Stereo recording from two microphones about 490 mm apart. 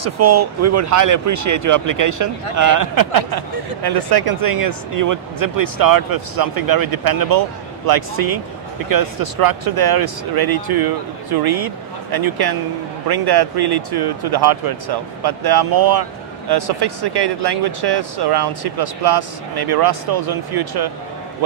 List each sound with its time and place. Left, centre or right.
0.0 s speech: right